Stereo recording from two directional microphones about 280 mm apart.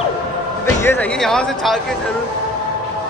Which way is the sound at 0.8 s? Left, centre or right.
Centre.